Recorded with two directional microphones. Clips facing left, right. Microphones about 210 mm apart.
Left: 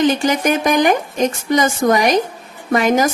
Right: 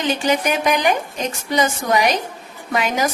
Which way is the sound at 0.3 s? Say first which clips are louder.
Left 2 dB; 45° left (ahead or behind).